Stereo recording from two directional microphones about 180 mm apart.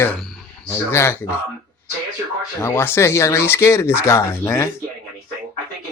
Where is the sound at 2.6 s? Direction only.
15° left (ahead or behind).